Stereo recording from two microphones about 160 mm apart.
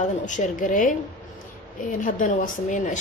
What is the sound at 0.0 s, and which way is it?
Speech, 50° left (ahead or behind).